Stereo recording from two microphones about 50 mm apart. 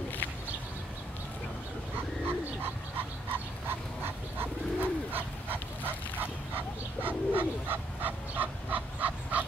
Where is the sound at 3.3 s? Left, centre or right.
Right.